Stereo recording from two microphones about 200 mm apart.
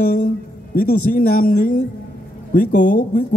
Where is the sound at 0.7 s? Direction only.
45° left (ahead or behind).